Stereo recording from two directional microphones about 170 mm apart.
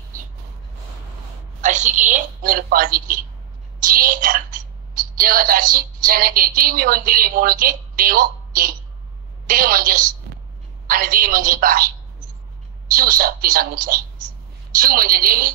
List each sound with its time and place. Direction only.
1.6 s a woman's voice: 45° right (ahead or behind)
12.9 s a woman's voice: 55° right (ahead or behind)